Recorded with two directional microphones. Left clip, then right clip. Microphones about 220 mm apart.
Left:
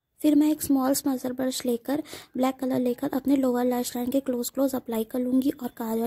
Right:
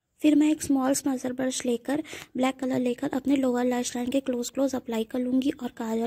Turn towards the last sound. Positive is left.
turn(degrees=0)  # may be behind; listen again after turning